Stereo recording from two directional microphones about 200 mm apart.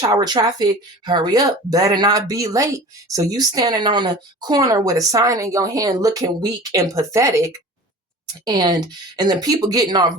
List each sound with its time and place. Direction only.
0.0 s speech: 20° right (ahead or behind)